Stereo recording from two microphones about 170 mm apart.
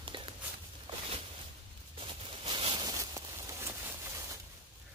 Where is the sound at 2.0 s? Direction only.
30° right (ahead or behind).